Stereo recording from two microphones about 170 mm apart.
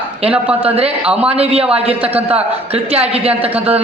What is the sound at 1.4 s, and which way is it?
A man's voice, 35° right (ahead or behind).